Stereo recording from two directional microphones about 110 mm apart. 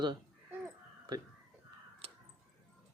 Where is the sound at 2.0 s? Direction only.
60° right (ahead or behind).